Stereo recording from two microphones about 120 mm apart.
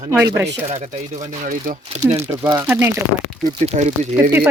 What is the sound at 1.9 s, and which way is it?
Speech, 70° right (ahead or behind).